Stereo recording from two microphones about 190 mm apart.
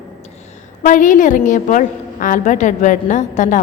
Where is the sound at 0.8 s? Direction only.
45° left (ahead or behind).